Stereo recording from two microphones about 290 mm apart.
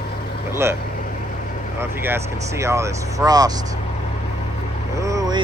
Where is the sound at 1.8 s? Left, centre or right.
Centre.